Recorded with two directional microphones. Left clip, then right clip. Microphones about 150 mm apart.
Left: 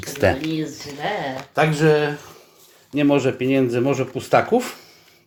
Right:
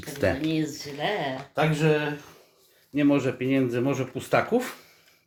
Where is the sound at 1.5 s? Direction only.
45° left (ahead or behind).